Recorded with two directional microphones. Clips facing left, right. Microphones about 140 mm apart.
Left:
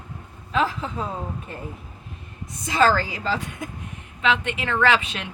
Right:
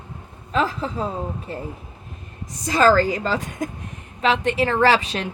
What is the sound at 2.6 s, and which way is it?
A woman's voice, 40° right (ahead or behind).